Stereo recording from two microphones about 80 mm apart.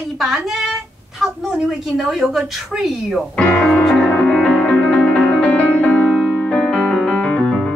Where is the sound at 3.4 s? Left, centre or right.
Centre.